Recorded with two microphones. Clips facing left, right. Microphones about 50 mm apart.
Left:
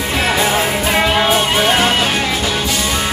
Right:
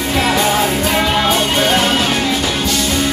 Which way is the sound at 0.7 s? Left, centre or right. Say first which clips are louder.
Even; centre.